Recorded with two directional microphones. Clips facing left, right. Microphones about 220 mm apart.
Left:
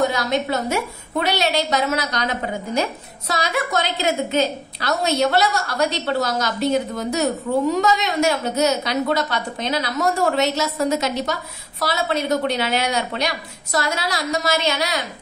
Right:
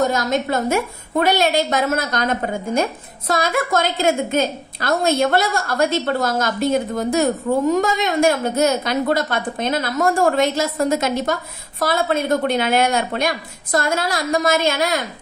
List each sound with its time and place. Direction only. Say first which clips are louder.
0.0 s a woman's voice: right 1 dB; 45° right (ahead or behind)